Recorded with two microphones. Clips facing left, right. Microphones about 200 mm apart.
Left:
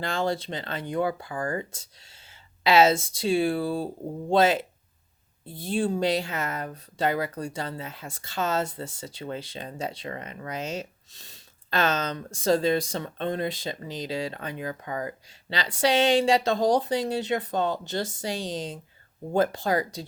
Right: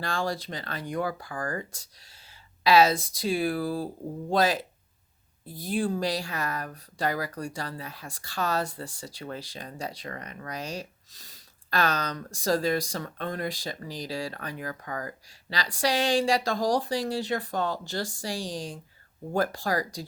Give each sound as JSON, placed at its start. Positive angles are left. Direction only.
{"t": 0.0, "sound": "speech", "side_deg": 20}